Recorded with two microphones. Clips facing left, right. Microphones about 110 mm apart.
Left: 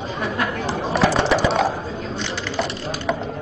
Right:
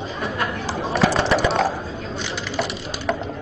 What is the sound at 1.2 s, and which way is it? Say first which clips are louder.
Typing: left 1 dB; centre (ahead or behind).